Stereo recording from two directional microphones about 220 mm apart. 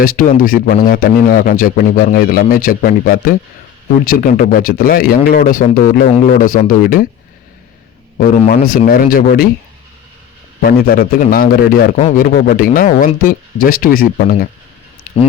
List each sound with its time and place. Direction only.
0.0 s a man's voice: 40° left (ahead or behind)
8.2 s a man's voice: 35° left (ahead or behind)
8.6 s a man's voice: 40° left (ahead or behind)
10.6 s a man's voice: 45° left (ahead or behind)